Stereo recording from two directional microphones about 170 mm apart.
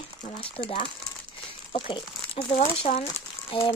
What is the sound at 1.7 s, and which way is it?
Speech, 30° left (ahead or behind).